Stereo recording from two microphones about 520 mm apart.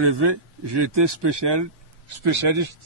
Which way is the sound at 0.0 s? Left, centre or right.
Right.